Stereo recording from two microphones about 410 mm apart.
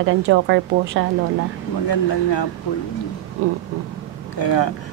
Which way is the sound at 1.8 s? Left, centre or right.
Left.